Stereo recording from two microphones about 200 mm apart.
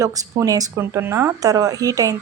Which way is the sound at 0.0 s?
15° right (ahead or behind).